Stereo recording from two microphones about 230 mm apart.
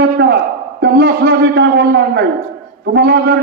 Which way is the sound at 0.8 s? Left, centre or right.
Right.